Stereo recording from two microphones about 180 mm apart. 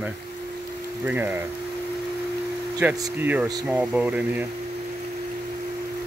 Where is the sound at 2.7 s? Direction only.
10° right (ahead or behind).